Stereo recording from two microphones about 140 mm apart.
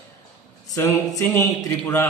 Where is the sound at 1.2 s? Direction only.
20° left (ahead or behind).